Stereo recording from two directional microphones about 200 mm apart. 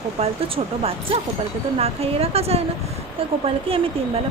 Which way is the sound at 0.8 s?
30° right (ahead or behind).